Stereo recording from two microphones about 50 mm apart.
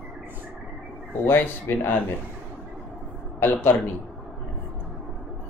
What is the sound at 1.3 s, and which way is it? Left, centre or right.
Speech, left.